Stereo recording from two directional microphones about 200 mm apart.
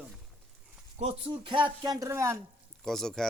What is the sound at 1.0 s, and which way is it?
Speech, 30° right (ahead or behind).